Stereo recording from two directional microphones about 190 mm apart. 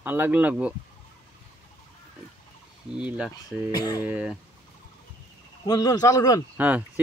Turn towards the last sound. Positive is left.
turn(degrees=-10)  # may be behind; listen again after turning